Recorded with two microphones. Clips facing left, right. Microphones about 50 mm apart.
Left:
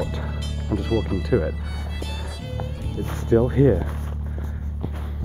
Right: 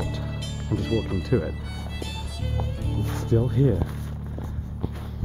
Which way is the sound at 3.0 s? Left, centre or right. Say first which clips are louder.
Left 6 dB; left.